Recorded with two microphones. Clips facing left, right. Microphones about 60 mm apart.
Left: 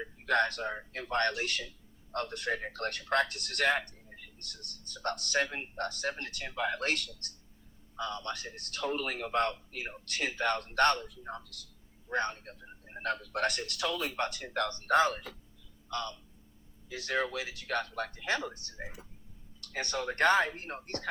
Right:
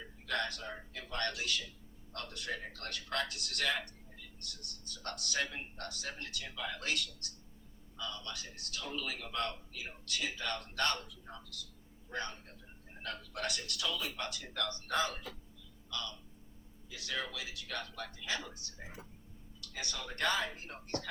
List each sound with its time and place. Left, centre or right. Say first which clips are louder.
0.0 s a man's voice: left 8 dB; left